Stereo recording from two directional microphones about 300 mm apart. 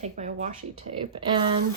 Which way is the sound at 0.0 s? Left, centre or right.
Right.